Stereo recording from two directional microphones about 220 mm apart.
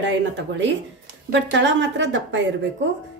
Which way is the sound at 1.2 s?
55° right (ahead or behind).